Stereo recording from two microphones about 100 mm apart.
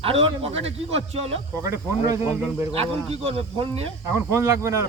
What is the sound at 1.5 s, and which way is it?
Speech, 35° right (ahead or behind).